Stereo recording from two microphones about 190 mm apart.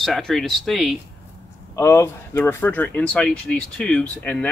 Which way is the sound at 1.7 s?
15° left (ahead or behind).